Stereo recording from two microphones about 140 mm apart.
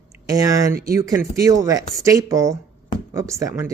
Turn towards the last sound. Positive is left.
turn(degrees=-20)  # may be behind; listen again after turning